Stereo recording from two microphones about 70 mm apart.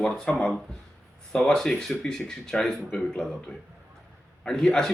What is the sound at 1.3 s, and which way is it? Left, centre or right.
Speech, centre.